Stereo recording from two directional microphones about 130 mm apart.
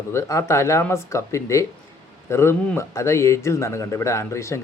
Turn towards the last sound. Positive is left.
turn(degrees=20)  # may be behind; listen again after turning